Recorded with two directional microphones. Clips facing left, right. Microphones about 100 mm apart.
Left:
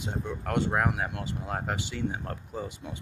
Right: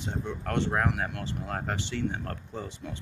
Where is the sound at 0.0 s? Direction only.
10° left (ahead or behind).